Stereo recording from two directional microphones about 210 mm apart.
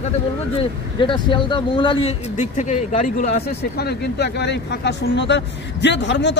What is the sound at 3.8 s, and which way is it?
Speech, 55° left (ahead or behind).